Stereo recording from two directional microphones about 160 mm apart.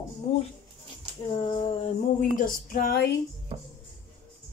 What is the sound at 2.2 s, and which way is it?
Speech, 60° left (ahead or behind).